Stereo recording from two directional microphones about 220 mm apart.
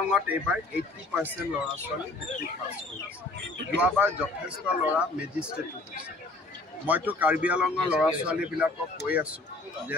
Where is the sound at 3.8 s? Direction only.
5° right (ahead or behind).